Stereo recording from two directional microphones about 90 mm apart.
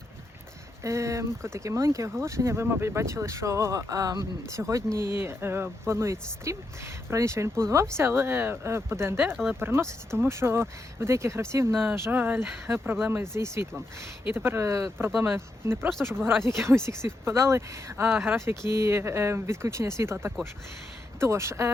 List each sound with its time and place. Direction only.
0.8 s speech: 35° right (ahead or behind)